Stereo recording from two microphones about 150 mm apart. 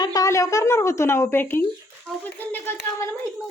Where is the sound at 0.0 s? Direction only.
25° left (ahead or behind).